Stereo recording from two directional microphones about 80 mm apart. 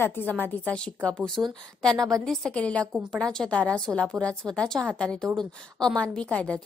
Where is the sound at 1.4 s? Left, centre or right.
Right.